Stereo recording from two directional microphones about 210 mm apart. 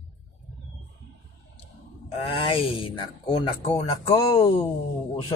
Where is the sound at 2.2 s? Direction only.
25° left (ahead or behind).